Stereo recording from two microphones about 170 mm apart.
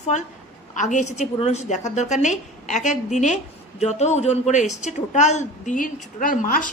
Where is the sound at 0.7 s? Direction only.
45° left (ahead or behind).